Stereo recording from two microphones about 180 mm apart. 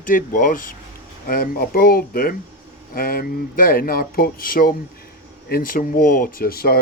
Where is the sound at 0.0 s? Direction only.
50° left (ahead or behind).